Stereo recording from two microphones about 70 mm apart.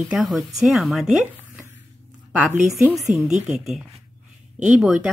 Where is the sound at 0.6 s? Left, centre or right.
Centre.